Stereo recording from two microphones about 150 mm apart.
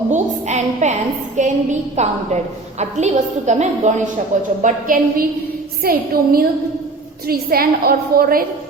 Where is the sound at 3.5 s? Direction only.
50° right (ahead or behind).